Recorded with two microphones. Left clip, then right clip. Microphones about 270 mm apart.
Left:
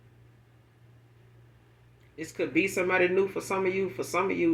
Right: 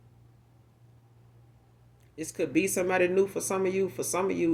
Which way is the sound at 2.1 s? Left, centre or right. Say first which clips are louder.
Even; right.